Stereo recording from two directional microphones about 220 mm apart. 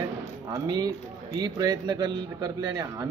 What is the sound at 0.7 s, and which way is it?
Speech, 15° right (ahead or behind).